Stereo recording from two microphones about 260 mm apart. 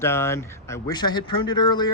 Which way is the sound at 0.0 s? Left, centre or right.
Centre.